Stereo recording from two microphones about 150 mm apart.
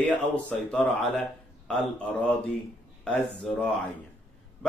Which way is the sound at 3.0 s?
5° left (ahead or behind).